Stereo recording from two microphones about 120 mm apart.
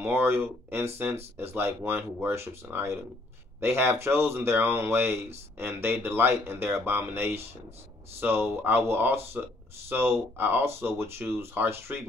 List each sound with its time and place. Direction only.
0.0 s speech: 20° right (ahead or behind)